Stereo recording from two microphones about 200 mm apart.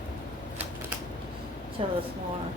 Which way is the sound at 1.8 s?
30° right (ahead or behind).